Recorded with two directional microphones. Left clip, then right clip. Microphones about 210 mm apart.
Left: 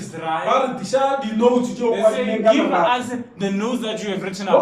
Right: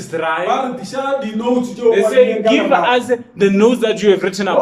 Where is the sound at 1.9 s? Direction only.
45° right (ahead or behind).